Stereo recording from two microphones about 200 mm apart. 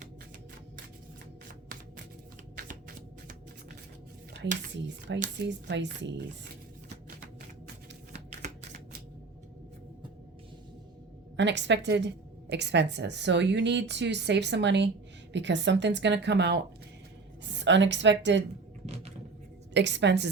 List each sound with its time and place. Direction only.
4.8 s a woman's voice: 60° right (ahead or behind)
11.3 s a woman's voice: 60° right (ahead or behind)
19.7 s a woman's voice: 60° right (ahead or behind)